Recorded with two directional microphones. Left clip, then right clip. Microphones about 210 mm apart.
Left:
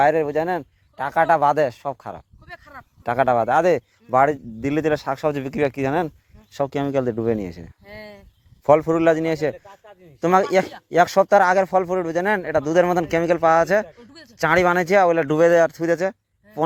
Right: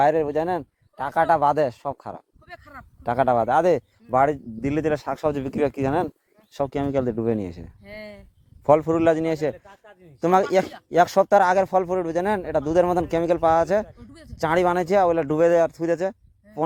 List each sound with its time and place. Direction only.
0.0 s speech: 10° right (ahead or behind)
2.5 s a sound: 55° right (ahead or behind)
3.0 s speech: 10° right (ahead or behind)
7.9 s speech: 50° right (ahead or behind)
8.6 s speech: 5° right (ahead or behind)
13.8 s a man's voice: 55° right (ahead or behind)
14.3 s speech: 5° right (ahead or behind)